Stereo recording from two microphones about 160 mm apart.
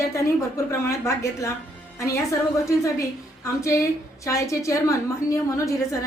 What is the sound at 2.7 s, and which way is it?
A woman's voice, 20° left (ahead or behind).